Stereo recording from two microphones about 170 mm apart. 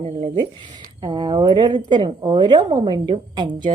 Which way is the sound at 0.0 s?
35° right (ahead or behind).